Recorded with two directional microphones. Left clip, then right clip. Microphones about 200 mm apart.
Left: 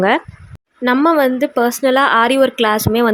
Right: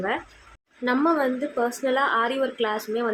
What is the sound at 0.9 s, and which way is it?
Speech, 45° left (ahead or behind).